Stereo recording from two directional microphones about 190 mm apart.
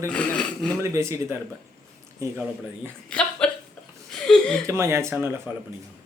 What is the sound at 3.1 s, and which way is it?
Speech, 5° left (ahead or behind).